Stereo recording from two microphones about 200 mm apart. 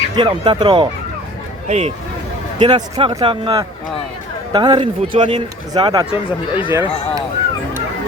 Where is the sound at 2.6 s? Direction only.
20° right (ahead or behind).